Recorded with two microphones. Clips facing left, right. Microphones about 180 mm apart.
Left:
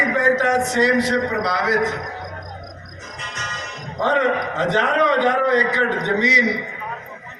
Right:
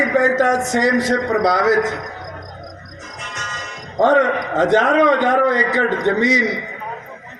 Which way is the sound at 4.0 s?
50° right (ahead or behind).